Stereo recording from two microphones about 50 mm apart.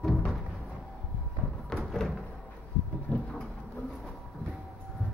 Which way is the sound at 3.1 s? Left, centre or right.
Left.